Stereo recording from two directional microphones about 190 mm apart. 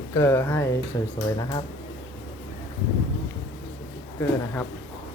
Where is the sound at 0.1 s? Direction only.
15° left (ahead or behind).